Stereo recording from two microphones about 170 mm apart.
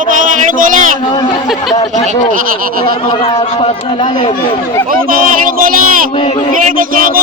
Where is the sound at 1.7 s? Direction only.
25° left (ahead or behind).